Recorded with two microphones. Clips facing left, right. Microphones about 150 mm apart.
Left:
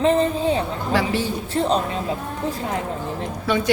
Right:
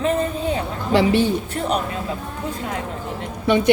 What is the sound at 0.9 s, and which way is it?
Speech, 20° right (ahead or behind).